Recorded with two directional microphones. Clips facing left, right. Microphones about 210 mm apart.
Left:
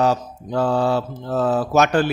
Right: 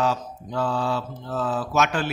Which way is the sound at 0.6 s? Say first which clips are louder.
Left 7 dB; 60° left (ahead or behind).